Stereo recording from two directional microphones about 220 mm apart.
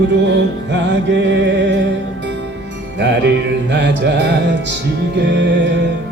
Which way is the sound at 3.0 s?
55° right (ahead or behind).